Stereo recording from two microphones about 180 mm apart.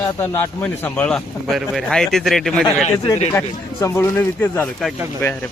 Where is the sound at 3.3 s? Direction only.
15° left (ahead or behind).